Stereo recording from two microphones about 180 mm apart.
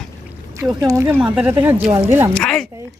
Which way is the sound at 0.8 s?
15° right (ahead or behind).